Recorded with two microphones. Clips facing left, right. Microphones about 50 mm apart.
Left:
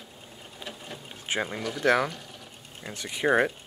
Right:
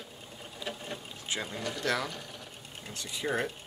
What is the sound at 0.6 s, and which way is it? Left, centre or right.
Sewing machine, left.